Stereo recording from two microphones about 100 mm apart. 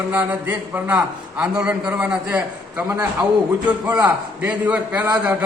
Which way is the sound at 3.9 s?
15° right (ahead or behind).